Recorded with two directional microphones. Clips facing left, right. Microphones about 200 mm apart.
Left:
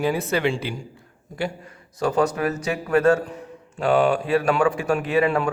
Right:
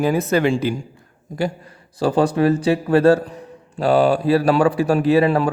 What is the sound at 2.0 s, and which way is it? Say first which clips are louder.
A man's voice: right 5 dB; 30° right (ahead or behind).